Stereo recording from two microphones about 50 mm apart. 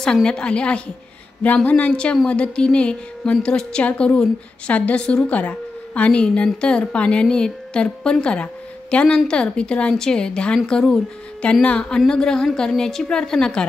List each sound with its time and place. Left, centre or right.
0.0 s a woman's voice: centre